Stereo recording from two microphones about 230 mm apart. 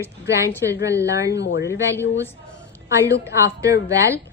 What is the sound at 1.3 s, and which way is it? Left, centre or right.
Speech, left.